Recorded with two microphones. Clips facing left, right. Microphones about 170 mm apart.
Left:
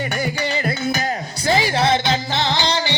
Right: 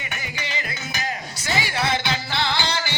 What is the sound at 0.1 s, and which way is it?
Music, 40° left (ahead or behind).